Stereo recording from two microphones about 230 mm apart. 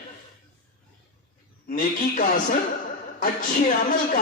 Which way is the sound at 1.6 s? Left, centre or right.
Left.